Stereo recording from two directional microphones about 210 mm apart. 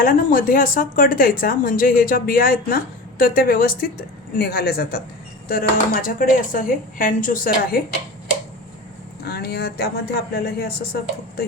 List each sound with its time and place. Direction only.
0.0 s speech: 40° left (ahead or behind)
9.2 s speech: 50° left (ahead or behind)